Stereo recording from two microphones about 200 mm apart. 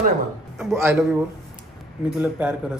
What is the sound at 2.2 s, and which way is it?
Speech, 5° right (ahead or behind).